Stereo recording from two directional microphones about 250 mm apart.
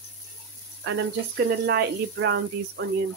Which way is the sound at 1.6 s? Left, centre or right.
Right.